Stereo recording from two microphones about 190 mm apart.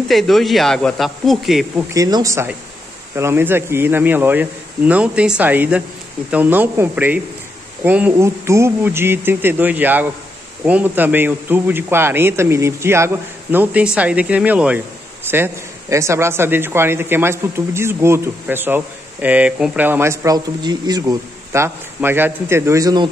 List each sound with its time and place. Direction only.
0.1 s speech: centre (ahead or behind)
2.0 s a man's voice: 20° right (ahead or behind)